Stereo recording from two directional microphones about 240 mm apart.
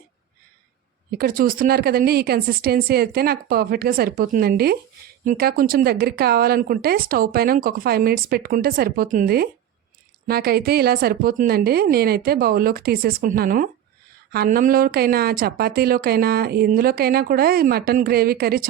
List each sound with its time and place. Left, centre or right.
1.1 s speech: right